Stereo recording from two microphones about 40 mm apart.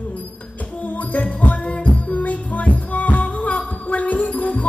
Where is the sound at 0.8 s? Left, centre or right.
Left.